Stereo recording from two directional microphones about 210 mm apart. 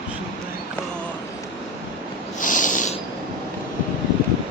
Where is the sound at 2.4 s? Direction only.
35° left (ahead or behind).